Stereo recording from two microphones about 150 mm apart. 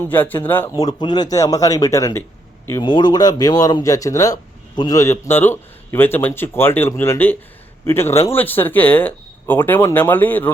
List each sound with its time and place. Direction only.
0.0 s speech: 10° left (ahead or behind)
0.8 s speech: 25° left (ahead or behind); by 10.5 s 10° left (ahead or behind)